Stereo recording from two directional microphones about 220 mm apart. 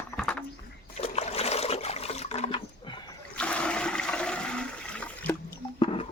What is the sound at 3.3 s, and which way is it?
Toilet flush, 5° left (ahead or behind).